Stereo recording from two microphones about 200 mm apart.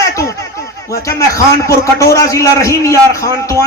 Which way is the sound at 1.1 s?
15° left (ahead or behind).